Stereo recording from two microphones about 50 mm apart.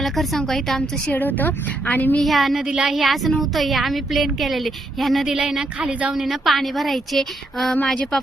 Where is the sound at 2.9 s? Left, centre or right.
Centre.